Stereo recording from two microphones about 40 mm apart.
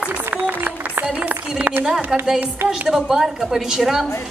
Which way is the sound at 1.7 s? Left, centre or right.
Right.